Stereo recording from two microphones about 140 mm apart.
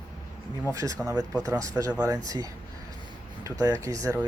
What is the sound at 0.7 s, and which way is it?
Speech, 25° right (ahead or behind).